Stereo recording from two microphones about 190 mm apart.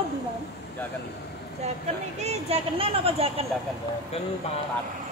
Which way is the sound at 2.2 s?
35° right (ahead or behind).